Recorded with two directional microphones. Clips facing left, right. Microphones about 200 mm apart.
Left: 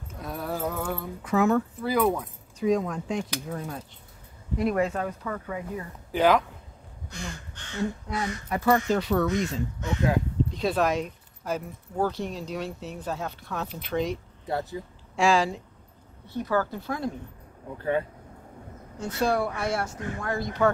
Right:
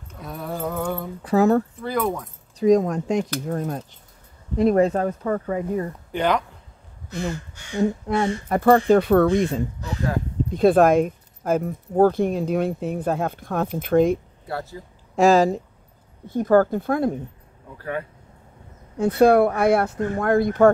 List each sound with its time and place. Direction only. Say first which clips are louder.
0.1 s mantra: right 1 dB; centre (ahead or behind)
1.2 s speech: right 5 dB; 35° right (ahead or behind)
1.8 s speech: even; centre (ahead or behind)
2.6 s speech: right 7 dB; 45° right (ahead or behind)
6.1 s speech: left 1 dB; centre (ahead or behind)
7.1 s crow: right 11 dB; 5° right (ahead or behind)
8.1 s speech: right 9 dB; 30° right (ahead or behind)
8.5 s speech: right 7 dB; 50° right (ahead or behind)
9.8 s speech: left 1 dB; 35° right (ahead or behind)
10.5 s speech: right 11 dB; 50° right (ahead or behind)
14.5 s speech: left 1 dB; 20° left (ahead or behind)
15.1 s speech: right 7 dB; 45° right (ahead or behind)
18.9 s speech: right 11 dB; 60° right (ahead or behind)